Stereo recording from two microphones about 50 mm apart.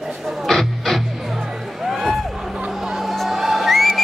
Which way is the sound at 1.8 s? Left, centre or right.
Centre.